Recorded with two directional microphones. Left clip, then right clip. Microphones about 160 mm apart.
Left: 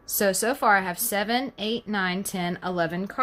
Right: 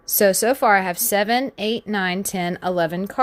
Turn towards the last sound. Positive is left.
turn(degrees=-45)  # may be behind; listen again after turning